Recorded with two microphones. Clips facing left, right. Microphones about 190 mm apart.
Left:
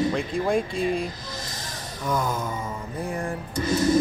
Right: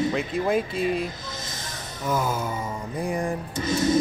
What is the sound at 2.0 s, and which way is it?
Music, 5° right (ahead or behind).